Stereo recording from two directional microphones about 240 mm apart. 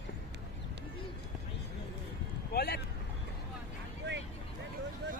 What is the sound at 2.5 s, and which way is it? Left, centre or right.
Vehicle, left.